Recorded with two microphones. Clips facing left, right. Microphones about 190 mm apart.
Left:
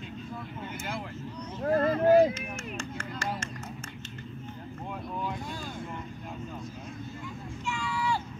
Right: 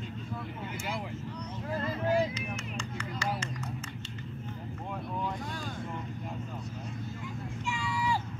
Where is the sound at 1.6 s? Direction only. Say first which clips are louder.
Left 9 dB; 55° left (ahead or behind).